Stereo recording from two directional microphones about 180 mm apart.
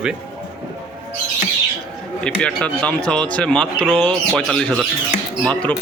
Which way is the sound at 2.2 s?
5° left (ahead or behind).